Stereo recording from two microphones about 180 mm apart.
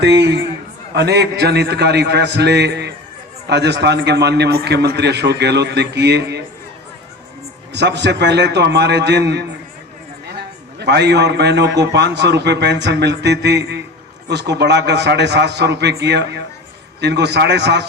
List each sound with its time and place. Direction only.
0.0 s a man's voice: 70° right (ahead or behind)
7.7 s a man's voice: 70° right (ahead or behind)